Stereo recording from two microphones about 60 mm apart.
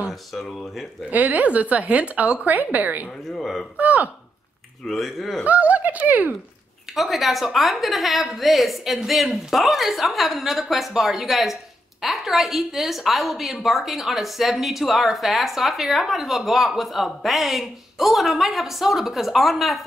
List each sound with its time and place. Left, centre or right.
0.3 s a woman's voice: centre
1.1 s a woman's voice: right
3.3 s a woman's voice: centre
3.7 s a woman's voice: right
4.8 s a woman's voice: centre
5.4 s a woman's voice: right
7.0 s a woman's voice: centre